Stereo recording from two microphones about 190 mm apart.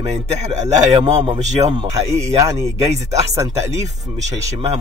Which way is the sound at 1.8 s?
15° right (ahead or behind).